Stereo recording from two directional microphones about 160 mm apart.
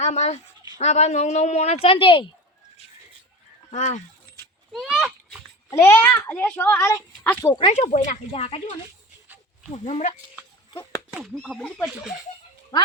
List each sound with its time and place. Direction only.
0.0 s a woman's voice: 45° left (ahead or behind)
3.7 s a woman's voice: 50° left (ahead or behind)
4.7 s a sound: centre (ahead or behind)
5.7 s a child's voice: 15° left (ahead or behind)
7.7 s a woman's voice: 50° left (ahead or behind)
9.7 s a woman's voice: 40° left (ahead or behind)
11.2 s speech: 5° left (ahead or behind)